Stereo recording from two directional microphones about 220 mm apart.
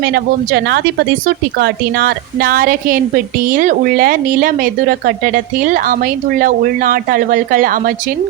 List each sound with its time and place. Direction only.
0.0 s a woman's voice: 45° right (ahead or behind)